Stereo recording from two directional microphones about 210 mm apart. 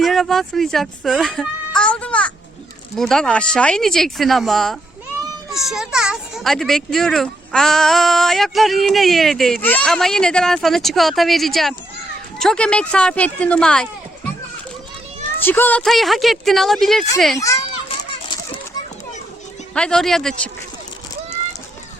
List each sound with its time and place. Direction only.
0.0 s a child's voice: centre (ahead or behind)
15.4 s a child's voice: 10° left (ahead or behind)
18.1 s a sound: 25° left (ahead or behind)
19.7 s a child's voice: 5° left (ahead or behind)